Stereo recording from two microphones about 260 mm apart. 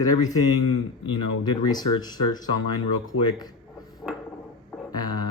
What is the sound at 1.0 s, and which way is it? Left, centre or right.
Speech, centre.